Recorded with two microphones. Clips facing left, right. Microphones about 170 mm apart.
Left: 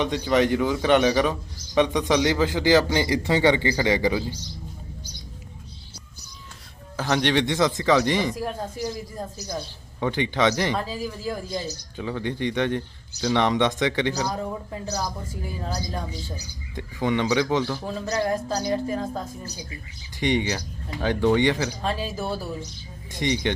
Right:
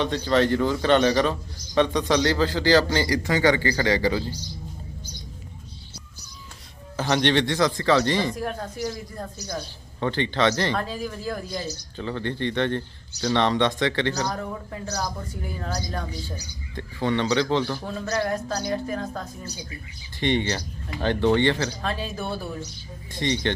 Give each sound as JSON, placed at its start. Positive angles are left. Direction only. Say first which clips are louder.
{"t": 0.0, "sound": "a man's voice", "louder": "even", "side_deg": 15}
{"t": 6.9, "sound": "a man's voice", "louder": "right 1 dB", "side_deg": 5}
{"t": 7.4, "sound": "a man's voice", "louder": "even", "side_deg": 20}
{"t": 16.7, "sound": "a man's voice", "louder": "even", "side_deg": 15}